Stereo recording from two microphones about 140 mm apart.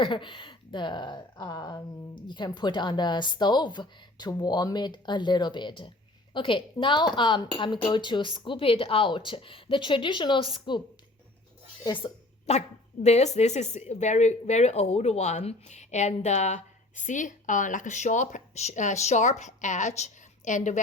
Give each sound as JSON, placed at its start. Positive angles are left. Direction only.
{"t": 0.0, "sound": "a woman's voice", "side_deg": 35}
{"t": 12.5, "sound": "speech", "side_deg": 55}